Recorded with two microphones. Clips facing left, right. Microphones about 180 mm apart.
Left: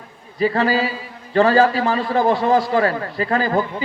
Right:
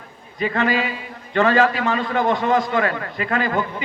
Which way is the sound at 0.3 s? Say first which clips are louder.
Left 3 dB; 35° left (ahead or behind).